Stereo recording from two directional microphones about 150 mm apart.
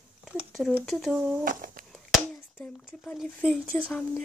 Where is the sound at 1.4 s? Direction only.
65° right (ahead or behind).